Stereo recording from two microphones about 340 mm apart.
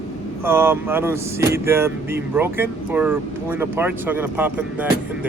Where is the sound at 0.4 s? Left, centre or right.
Centre.